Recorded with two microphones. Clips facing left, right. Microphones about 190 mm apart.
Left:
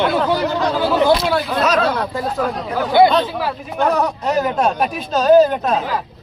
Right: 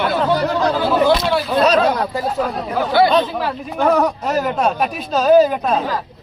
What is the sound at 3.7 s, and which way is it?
Speech, 5° right (ahead or behind).